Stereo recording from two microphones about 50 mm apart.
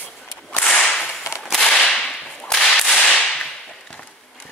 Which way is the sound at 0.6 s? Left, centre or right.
Centre.